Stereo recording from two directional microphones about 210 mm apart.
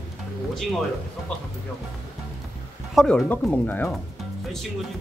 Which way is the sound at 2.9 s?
Centre (ahead or behind).